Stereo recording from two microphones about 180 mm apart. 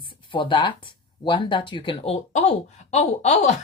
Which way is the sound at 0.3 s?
25° left (ahead or behind).